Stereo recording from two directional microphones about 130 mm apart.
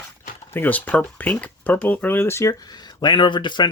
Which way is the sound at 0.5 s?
15° left (ahead or behind).